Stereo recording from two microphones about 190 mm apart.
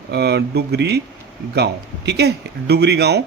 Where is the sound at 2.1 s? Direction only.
60° right (ahead or behind).